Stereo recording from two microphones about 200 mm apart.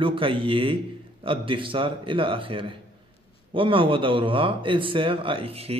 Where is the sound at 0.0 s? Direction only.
25° right (ahead or behind).